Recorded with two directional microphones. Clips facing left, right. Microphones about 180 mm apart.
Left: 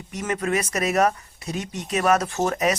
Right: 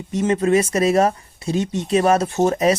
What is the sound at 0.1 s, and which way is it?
Speech, 25° right (ahead or behind).